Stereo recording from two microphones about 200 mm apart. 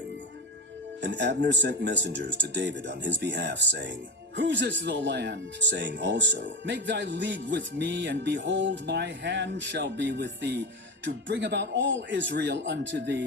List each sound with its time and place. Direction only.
1.0 s speech: 60° right (ahead or behind)